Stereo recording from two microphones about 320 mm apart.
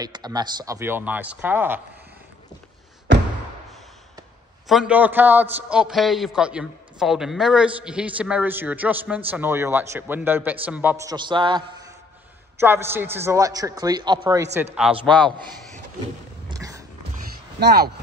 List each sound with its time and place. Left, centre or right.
0.0 s a man's voice: centre
4.6 s a man's voice: centre
15.2 s speech: centre
16.4 s a sound: centre
17.6 s speech: right